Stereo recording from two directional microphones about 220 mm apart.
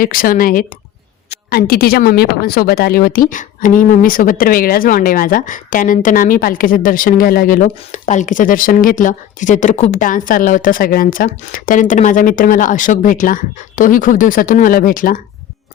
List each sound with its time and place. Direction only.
0.0 s a woman's voice: 40° left (ahead or behind)